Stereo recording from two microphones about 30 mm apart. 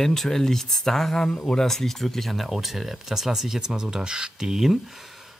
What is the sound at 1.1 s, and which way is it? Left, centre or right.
Speech, left.